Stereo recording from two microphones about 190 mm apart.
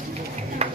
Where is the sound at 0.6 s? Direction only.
35° right (ahead or behind).